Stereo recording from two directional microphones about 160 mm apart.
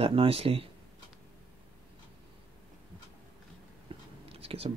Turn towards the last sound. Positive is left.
turn(degrees=-40)  # may be behind; listen again after turning